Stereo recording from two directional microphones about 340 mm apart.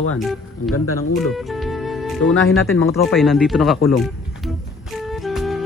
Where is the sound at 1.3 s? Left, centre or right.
Centre.